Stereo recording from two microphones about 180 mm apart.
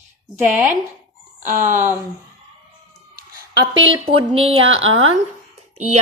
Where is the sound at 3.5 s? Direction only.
90° right.